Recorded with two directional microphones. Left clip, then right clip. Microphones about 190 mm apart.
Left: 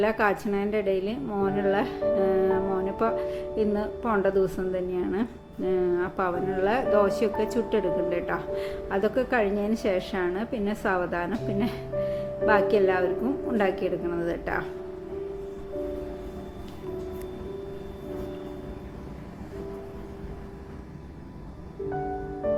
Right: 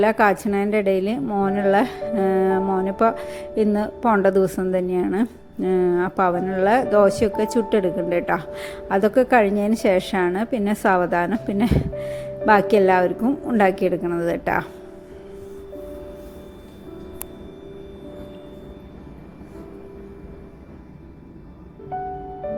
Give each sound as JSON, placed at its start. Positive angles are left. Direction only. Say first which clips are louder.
{"t": 0.0, "sound": "a woman's voice", "louder": "right 7 dB", "side_deg": -40}